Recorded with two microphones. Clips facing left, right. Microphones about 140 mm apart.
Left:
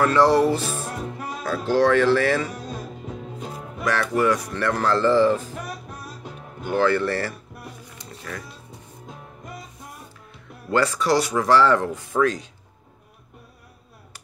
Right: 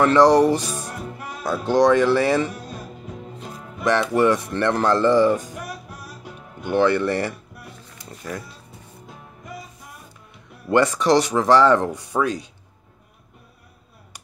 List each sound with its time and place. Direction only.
0.0 s speech: 20° right (ahead or behind)
3.8 s speech: 20° right (ahead or behind)
6.6 s speech: 20° right (ahead or behind)
10.7 s speech: 20° right (ahead or behind)